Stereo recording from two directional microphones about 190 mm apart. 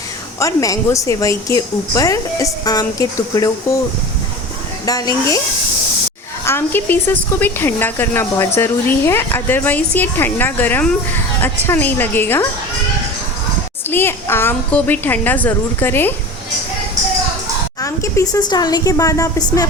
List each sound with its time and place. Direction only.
0.3 s a woman's voice: 15° left (ahead or behind)
4.9 s speech: 20° left (ahead or behind)
6.4 s a woman's voice: 15° left (ahead or behind)
13.9 s a woman's voice: 10° left (ahead or behind)
17.7 s speech: 15° left (ahead or behind)